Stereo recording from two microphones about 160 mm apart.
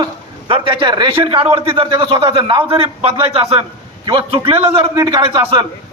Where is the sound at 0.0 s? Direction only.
35° right (ahead or behind).